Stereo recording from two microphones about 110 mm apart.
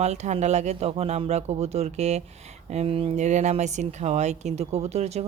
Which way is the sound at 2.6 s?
75° right (ahead or behind).